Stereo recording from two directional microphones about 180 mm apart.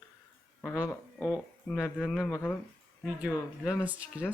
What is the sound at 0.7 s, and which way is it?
Speech, 5° right (ahead or behind).